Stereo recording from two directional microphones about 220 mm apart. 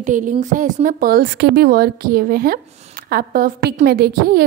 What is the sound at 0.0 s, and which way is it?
A woman's voice, 35° right (ahead or behind).